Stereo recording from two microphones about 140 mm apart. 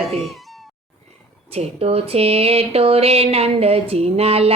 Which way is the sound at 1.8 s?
45° right (ahead or behind).